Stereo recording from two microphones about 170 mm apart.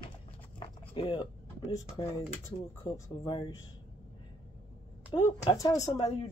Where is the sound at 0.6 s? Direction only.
30° left (ahead or behind).